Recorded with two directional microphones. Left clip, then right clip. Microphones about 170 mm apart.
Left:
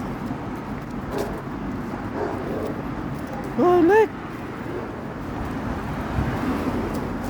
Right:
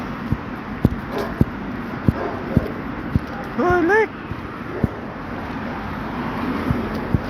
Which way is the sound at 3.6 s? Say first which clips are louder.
Even; 35° left (ahead or behind).